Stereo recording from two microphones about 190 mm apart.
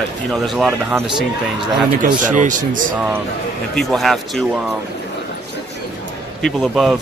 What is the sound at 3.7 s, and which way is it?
Speech, centre (ahead or behind).